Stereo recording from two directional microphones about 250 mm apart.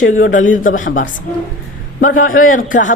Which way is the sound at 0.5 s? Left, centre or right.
Left.